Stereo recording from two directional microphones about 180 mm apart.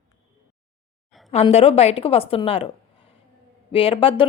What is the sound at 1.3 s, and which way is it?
A woman's voice, 35° left (ahead or behind).